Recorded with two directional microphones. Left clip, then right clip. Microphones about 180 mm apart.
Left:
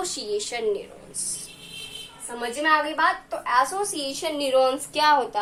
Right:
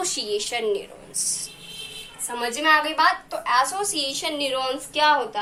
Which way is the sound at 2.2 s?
15° left (ahead or behind).